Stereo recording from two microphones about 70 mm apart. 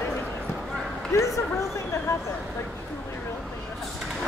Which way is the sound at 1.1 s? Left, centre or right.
Left.